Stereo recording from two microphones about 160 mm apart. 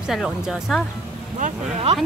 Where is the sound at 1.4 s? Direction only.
40° right (ahead or behind).